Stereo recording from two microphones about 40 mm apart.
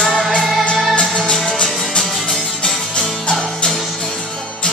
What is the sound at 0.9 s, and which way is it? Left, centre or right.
Music, left.